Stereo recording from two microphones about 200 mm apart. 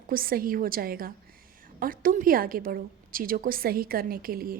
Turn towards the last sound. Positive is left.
turn(degrees=-45)  # may be behind; listen again after turning